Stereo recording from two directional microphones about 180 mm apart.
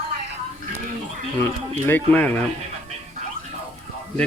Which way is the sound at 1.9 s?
5° left (ahead or behind).